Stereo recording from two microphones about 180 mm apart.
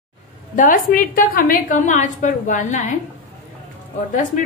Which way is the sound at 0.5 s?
50° left (ahead or behind).